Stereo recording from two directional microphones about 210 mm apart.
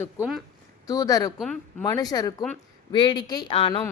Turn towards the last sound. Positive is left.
turn(degrees=25)  # may be behind; listen again after turning